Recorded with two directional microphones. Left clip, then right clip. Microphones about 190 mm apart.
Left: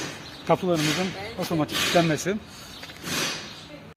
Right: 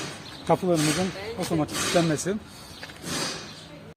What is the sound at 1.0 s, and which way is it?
Speech, 10° left (ahead or behind).